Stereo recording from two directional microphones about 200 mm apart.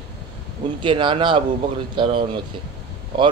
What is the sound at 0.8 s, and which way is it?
A man's voice, 25° right (ahead or behind).